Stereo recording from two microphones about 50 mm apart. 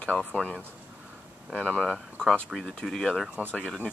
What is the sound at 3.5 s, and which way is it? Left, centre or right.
Speech, left.